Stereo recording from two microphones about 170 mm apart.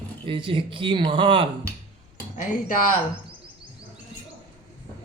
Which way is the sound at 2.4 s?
55° left (ahead or behind).